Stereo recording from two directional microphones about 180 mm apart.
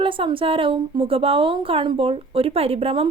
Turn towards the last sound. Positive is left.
turn(degrees=-30)  # may be behind; listen again after turning